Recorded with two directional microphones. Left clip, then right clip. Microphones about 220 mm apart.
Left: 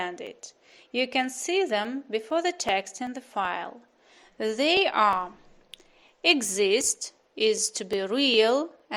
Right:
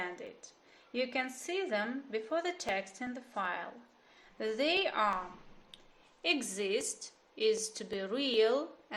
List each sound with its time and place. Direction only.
0.0 s a woman's voice: 40° left (ahead or behind)
5.7 s a sound: 40° left (ahead or behind)
6.2 s a woman's voice: 40° left (ahead or behind)